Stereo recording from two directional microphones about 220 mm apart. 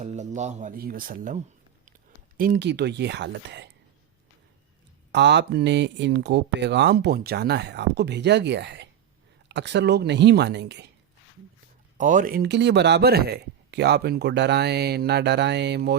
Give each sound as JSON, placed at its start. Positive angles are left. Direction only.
{"t": 0.0, "sound": "speech", "side_deg": -30}
{"t": 2.4, "sound": "speech", "side_deg": -45}
{"t": 5.1, "sound": "speech", "side_deg": -50}
{"t": 11.9, "sound": "speech", "side_deg": -35}